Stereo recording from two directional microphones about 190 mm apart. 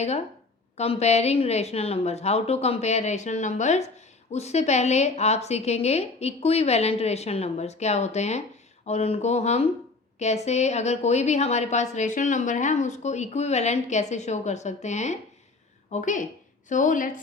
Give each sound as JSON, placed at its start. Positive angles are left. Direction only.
{"t": 0.8, "sound": "a woman's voice", "side_deg": 35}